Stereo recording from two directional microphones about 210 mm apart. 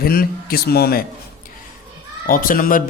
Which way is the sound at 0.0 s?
45° left (ahead or behind).